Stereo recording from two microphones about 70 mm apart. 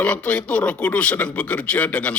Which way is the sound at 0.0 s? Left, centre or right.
Centre.